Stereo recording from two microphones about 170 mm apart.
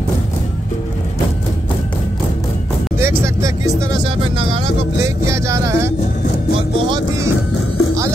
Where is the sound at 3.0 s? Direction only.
15° right (ahead or behind).